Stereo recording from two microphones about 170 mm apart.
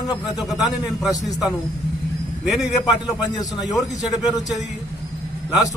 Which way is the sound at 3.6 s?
Centre (ahead or behind).